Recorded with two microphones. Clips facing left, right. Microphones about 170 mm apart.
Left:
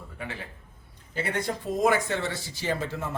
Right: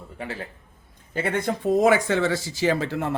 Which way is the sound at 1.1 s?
55° right (ahead or behind).